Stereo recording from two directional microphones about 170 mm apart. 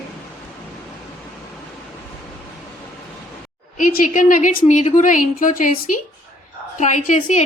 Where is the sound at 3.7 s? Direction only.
50° left (ahead or behind).